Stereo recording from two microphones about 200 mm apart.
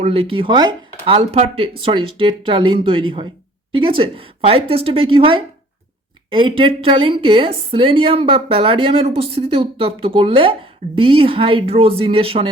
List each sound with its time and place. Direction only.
0.0 s a woman's voice: 30° right (ahead or behind)